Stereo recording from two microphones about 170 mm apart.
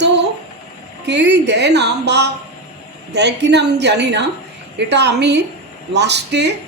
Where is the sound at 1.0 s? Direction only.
85° right.